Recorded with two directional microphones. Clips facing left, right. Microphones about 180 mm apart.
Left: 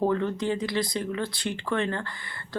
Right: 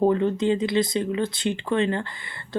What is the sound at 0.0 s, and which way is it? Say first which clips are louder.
Speech: right 5 dB; 20° right (ahead or behind).